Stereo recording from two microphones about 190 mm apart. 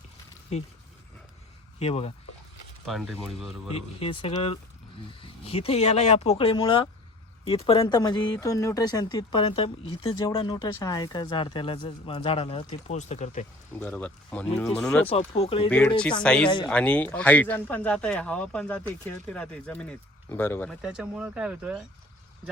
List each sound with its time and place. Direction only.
0.5 s speech: 35° left (ahead or behind)
1.8 s speech: 35° left (ahead or behind)
2.8 s speech: centre (ahead or behind)
4.0 s speech: 30° left (ahead or behind)
13.7 s speech: 10° left (ahead or behind)
15.3 s speech: 30° left (ahead or behind)
16.2 s speech: 5° left (ahead or behind)
20.8 s speech: 5° right (ahead or behind)